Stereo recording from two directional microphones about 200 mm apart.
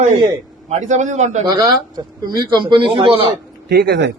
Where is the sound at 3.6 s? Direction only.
50° right (ahead or behind).